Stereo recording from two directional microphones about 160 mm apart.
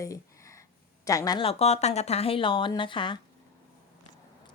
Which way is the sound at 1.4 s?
40° left (ahead or behind).